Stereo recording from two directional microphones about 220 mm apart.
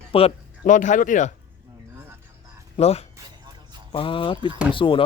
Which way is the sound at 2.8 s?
30° left (ahead or behind).